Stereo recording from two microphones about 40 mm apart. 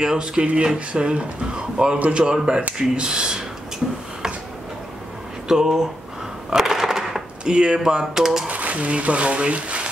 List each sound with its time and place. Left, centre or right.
0.0 s speech: centre
5.5 s speech: centre
6.5 s crushing: centre
7.4 s speech: right
8.5 s speech: right